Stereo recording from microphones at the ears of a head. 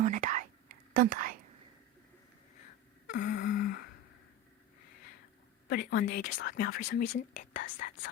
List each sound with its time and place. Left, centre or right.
0.0 s whispering: right
2.6 s a sound: left
5.6 s a woman's voice: left